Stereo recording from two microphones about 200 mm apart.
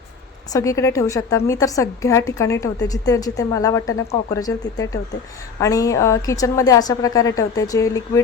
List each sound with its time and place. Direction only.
0.5 s a woman's voice: 15° left (ahead or behind)